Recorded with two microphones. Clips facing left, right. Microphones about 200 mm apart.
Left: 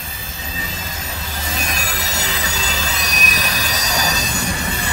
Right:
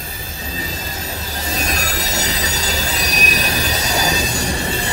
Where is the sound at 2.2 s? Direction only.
40° right (ahead or behind).